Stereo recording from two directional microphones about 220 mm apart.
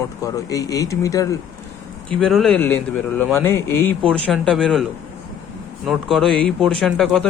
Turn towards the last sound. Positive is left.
turn(degrees=0)  # may be behind; listen again after turning